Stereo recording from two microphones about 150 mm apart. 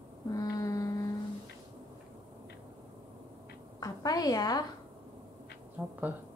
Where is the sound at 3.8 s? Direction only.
25° left (ahead or behind).